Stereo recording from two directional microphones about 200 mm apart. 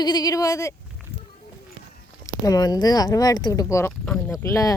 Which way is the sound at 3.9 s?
5° left (ahead or behind).